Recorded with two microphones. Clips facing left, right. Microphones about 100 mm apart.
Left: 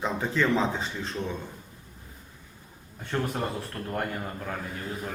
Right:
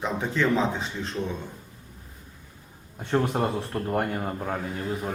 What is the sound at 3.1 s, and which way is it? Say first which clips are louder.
A man's voice: right 5 dB; 25° right (ahead or behind).